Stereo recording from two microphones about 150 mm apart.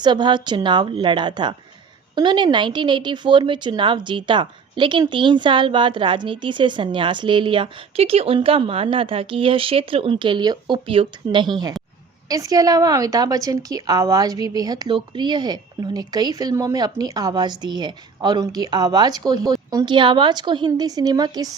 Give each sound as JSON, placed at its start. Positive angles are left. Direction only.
{"t": 0.0, "sound": "a woman's voice", "side_deg": -30}